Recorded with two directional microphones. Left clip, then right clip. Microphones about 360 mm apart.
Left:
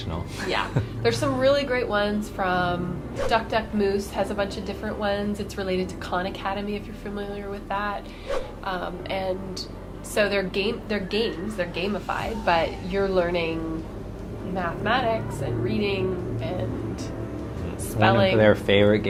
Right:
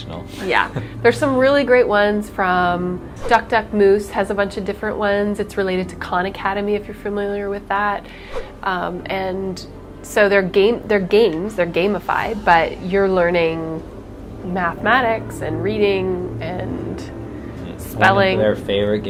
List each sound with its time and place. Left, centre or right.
0.5 s a woman's voice: right
16.4 s music: right
18.0 s a woman's voice: right
18.3 s speech: centre